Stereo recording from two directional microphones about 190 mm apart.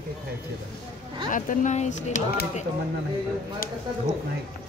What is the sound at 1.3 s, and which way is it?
Speech, 45° left (ahead or behind).